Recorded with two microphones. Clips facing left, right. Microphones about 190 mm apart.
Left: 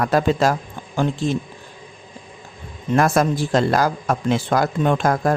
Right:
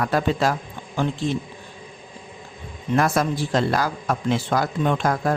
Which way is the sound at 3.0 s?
45° left (ahead or behind).